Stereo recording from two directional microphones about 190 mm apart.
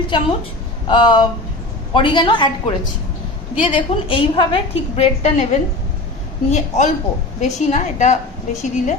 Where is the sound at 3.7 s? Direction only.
25° left (ahead or behind).